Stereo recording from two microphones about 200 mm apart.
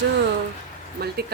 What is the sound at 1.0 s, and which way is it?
Speech, 50° right (ahead or behind).